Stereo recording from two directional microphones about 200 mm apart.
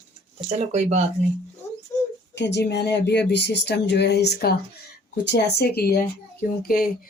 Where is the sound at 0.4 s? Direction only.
35° right (ahead or behind).